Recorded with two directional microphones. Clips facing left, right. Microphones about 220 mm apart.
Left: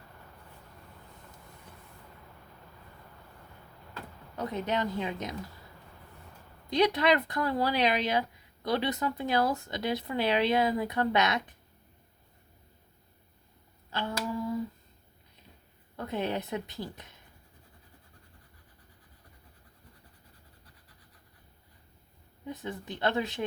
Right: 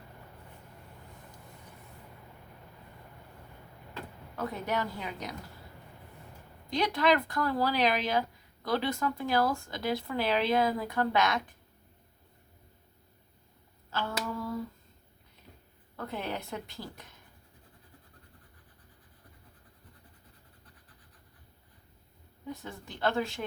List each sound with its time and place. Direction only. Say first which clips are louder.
4.4 s speech: left 2 dB; 20° left (ahead or behind)
6.7 s speech: left 2 dB; 20° left (ahead or behind)
13.9 s hands: left 1 dB; 15° left (ahead or behind)
16.0 s speech: left 4 dB; 20° left (ahead or behind)
22.4 s speech: left 4 dB; 20° left (ahead or behind)